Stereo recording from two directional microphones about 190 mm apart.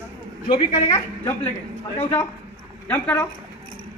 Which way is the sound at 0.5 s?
45° left (ahead or behind).